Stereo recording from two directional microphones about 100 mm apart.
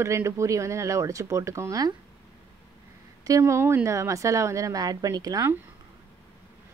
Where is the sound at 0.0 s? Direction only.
30° right (ahead or behind).